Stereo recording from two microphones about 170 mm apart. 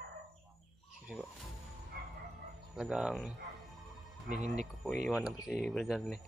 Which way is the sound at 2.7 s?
5° right (ahead or behind).